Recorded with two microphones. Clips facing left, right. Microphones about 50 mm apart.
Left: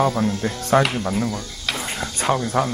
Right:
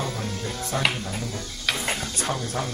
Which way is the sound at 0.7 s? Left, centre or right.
Left.